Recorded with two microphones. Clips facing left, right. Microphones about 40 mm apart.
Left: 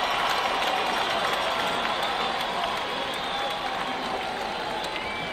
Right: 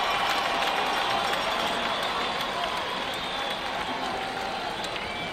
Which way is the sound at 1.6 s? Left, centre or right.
Centre.